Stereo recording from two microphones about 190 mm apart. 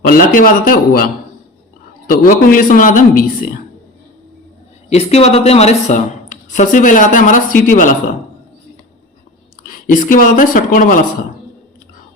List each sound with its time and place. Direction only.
0.0 s speech: 45° left (ahead or behind)
4.9 s speech: 35° left (ahead or behind)
9.6 s speech: 45° left (ahead or behind)